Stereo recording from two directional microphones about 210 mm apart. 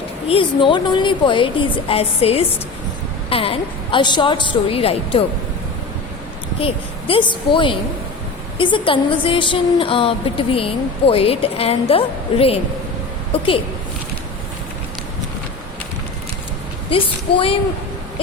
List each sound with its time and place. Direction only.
0.3 s a woman's voice: 25° left (ahead or behind)
7.1 s a woman's voice: 20° left (ahead or behind)
16.9 s a woman's voice: 25° left (ahead or behind)